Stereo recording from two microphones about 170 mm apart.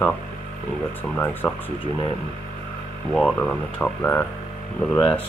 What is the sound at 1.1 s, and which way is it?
Speech, 10° left (ahead or behind).